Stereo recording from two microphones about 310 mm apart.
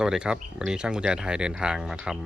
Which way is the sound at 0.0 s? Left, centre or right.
Centre.